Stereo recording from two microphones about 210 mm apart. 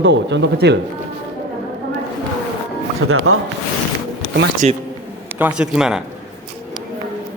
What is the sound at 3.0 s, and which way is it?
Speech, 80° right.